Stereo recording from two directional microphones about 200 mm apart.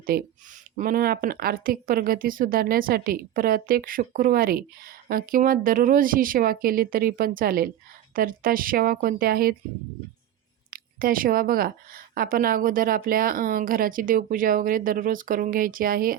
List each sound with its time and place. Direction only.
0.1 s speech: 50° right (ahead or behind)
10.7 s speech: 45° right (ahead or behind)